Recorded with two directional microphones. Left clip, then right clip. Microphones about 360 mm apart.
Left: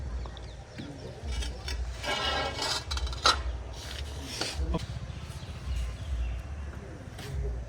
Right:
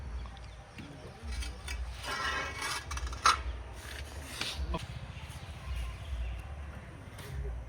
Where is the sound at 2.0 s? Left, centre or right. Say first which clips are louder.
Left 5 dB; left.